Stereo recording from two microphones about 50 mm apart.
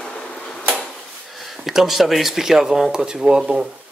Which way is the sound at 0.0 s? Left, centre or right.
Centre.